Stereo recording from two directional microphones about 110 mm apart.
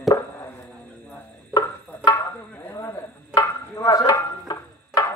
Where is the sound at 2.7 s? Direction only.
25° left (ahead or behind).